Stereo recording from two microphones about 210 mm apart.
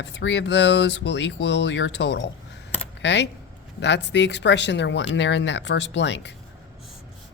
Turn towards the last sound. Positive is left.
turn(degrees=55)  # may be behind; listen again after turning